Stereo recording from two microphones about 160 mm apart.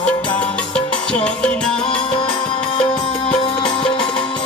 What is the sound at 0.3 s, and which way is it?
Music, 5° left (ahead or behind).